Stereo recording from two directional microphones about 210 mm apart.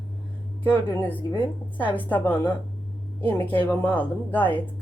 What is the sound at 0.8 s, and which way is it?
Speech, 10° left (ahead or behind).